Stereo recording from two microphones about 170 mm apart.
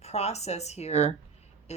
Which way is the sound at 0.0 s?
40° left (ahead or behind).